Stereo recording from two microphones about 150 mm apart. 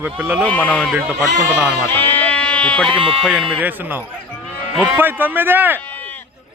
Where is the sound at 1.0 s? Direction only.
5° right (ahead or behind).